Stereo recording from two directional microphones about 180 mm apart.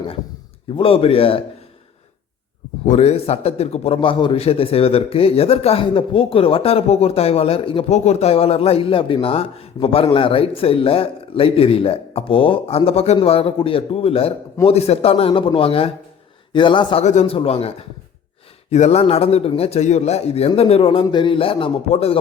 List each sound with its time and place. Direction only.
0.8 s a man's voice: 30° left (ahead or behind)
2.8 s a man's voice: 35° left (ahead or behind)